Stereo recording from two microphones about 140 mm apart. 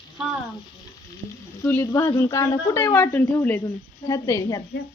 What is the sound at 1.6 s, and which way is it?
Speech, 15° left (ahead or behind).